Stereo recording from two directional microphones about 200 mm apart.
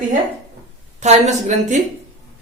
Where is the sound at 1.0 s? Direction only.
35° right (ahead or behind).